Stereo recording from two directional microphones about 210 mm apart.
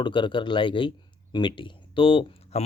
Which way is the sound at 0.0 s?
25° left (ahead or behind).